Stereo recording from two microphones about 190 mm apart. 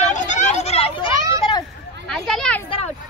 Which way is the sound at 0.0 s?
40° left (ahead or behind).